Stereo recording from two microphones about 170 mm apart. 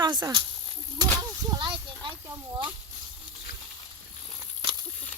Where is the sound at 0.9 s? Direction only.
25° right (ahead or behind).